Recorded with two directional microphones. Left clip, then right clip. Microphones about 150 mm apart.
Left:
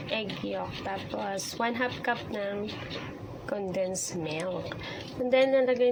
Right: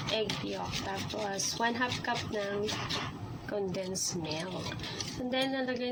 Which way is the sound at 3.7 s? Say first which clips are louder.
Left 5 dB; 15° left (ahead or behind).